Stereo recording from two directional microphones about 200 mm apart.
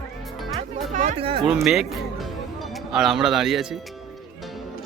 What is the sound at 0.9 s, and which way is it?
Speech, 35° right (ahead or behind).